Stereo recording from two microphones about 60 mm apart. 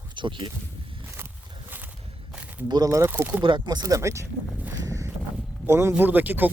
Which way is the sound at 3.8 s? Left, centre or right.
Right.